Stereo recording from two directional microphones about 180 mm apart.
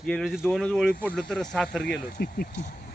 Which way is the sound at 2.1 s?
55° left (ahead or behind).